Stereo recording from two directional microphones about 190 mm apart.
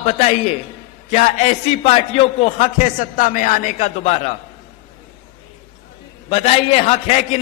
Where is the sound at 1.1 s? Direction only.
35° left (ahead or behind).